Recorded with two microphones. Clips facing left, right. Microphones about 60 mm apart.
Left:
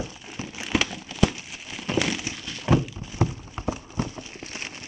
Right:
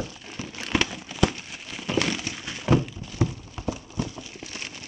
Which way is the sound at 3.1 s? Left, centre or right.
Left.